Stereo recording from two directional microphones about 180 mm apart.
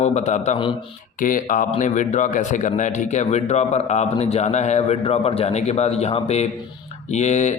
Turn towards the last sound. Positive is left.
turn(degrees=40)  # may be behind; listen again after turning